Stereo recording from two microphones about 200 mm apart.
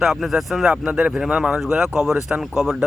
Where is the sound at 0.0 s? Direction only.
Centre (ahead or behind).